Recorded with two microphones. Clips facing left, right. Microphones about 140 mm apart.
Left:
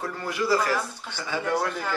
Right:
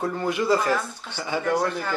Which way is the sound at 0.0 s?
20° right (ahead or behind).